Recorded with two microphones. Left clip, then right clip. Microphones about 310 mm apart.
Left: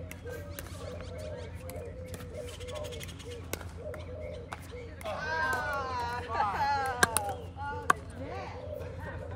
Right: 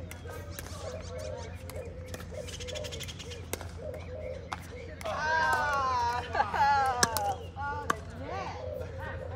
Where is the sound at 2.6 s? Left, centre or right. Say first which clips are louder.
Right 1 dB; right.